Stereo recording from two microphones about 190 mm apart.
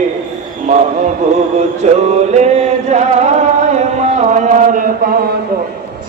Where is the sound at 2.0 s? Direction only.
35° right (ahead or behind).